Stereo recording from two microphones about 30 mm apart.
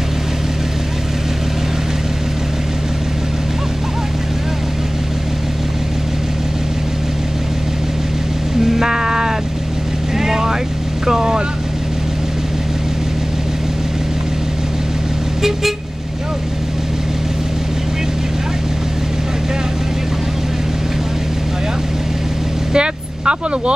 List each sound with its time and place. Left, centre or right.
8.6 s music: centre
10.1 s vehicle: centre
22.7 s vehicle: right